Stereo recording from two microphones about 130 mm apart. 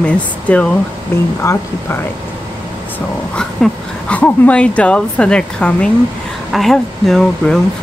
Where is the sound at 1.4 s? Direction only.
20° left (ahead or behind).